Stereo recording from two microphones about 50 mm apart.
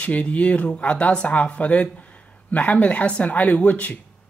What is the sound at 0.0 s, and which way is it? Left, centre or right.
Speech, left.